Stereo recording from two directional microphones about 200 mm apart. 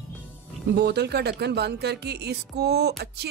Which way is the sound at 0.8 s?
55° right (ahead or behind).